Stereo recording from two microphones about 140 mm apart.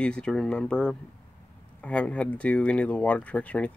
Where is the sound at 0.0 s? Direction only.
5° left (ahead or behind).